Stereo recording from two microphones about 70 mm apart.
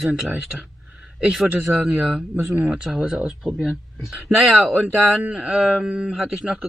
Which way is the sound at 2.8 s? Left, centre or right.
Centre.